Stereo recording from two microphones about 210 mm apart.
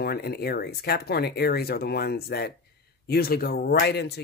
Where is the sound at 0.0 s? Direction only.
50° left (ahead or behind).